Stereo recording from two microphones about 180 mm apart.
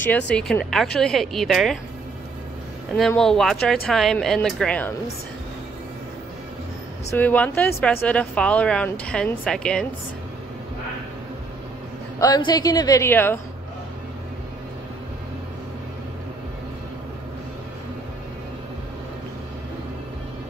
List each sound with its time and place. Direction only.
0.3 s a woman's voice: 5° left (ahead or behind)
2.9 s a woman's voice: 5° left (ahead or behind)
7.1 s a woman's voice: 10° left (ahead or behind)
12.2 s a woman's voice: 25° left (ahead or behind)